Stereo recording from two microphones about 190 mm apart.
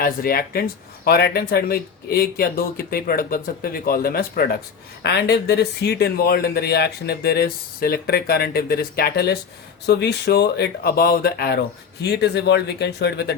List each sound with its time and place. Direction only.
0.0 s speech: 50° left (ahead or behind)